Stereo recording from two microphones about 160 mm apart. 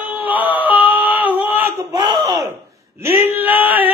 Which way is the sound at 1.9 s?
25° right (ahead or behind).